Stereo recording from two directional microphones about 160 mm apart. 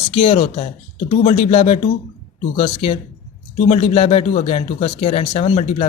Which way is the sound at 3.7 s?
40° left (ahead or behind).